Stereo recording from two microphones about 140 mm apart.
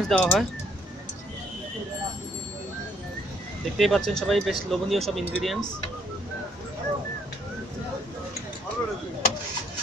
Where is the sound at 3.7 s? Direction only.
Centre (ahead or behind).